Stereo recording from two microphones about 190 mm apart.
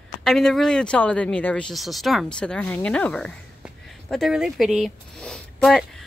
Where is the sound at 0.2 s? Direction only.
5° left (ahead or behind).